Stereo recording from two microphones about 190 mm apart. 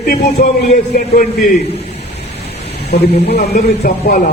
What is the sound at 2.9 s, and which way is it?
Speech, 60° left (ahead or behind).